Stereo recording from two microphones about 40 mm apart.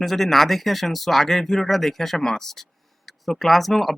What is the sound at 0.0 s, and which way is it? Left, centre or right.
Speech, centre.